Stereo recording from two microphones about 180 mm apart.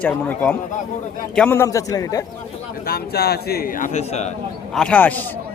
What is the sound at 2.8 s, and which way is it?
A man's voice, 60° left (ahead or behind).